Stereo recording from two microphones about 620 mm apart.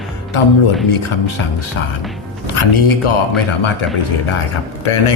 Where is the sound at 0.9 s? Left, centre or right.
Left.